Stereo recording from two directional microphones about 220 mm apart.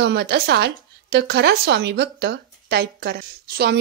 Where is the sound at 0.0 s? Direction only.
50° right (ahead or behind).